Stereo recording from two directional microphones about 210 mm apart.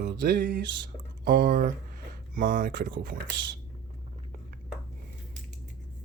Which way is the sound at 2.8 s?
60° right (ahead or behind).